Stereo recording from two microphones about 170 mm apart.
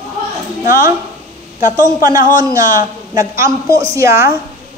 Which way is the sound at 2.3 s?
20° right (ahead or behind).